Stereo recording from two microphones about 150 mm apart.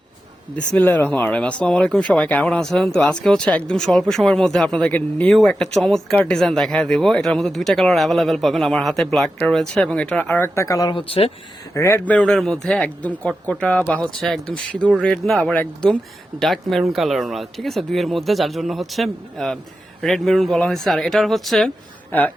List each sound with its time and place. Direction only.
0.5 s speech: 10° left (ahead or behind)
10.9 s speech: 40° left (ahead or behind)
11.7 s speech: 20° left (ahead or behind); by 21.7 s centre (ahead or behind)